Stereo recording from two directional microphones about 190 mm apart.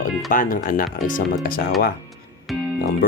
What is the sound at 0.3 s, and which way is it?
Speech, 45° left (ahead or behind).